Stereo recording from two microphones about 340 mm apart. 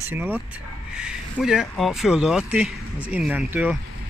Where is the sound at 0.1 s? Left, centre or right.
Centre.